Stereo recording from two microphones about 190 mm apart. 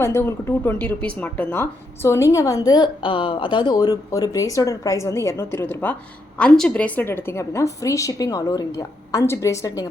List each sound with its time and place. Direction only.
0.0 s a woman's voice: 15° left (ahead or behind)